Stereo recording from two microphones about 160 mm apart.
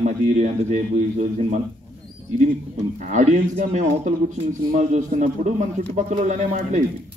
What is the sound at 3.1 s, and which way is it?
Speech, 50° right (ahead or behind).